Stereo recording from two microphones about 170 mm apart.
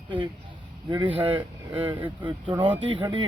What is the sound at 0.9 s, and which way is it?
Speech, 25° right (ahead or behind).